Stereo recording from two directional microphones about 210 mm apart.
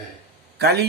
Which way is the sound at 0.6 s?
50° right (ahead or behind).